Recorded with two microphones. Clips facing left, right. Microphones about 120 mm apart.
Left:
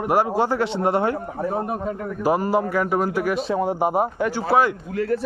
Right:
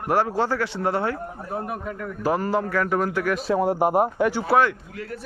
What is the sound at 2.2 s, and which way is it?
Speech, 10° left (ahead or behind).